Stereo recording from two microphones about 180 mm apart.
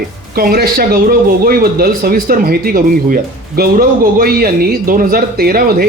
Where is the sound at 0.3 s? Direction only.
55° right (ahead or behind).